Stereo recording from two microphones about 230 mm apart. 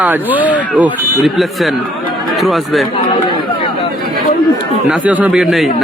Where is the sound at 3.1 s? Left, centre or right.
Centre.